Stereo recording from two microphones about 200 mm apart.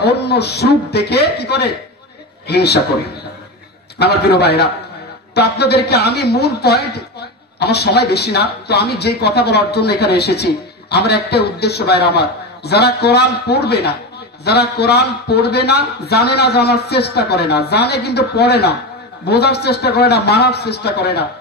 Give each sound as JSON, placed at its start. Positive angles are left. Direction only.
{"t": 0.0, "sound": "a woman's voice", "side_deg": 55}
{"t": 4.0, "sound": "a woman's voice", "side_deg": 55}